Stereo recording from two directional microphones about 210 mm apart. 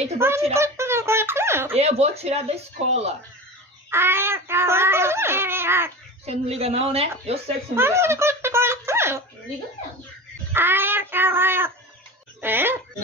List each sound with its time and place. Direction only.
0.2 s a child's voice: 10° right (ahead or behind)
0.6 s a sound: 10° right (ahead or behind)
1.8 s speech: 30° right (ahead or behind)
3.9 s a child's voice: 10° right (ahead or behind)
6.2 s speech: 30° right (ahead or behind)
7.7 s speech: 10° right (ahead or behind)
10.5 s a child's voice: 10° right (ahead or behind)